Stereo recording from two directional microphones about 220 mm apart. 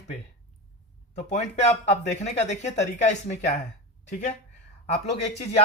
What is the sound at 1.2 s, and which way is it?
Speech, 30° left (ahead or behind).